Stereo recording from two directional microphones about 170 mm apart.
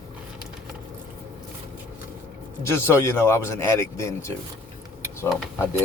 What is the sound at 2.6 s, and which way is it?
Speech, 15° left (ahead or behind).